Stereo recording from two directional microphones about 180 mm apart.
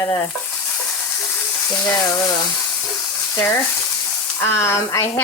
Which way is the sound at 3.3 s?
15° left (ahead or behind).